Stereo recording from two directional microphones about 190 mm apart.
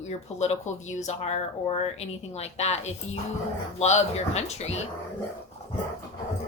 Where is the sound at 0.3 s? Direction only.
40° left (ahead or behind).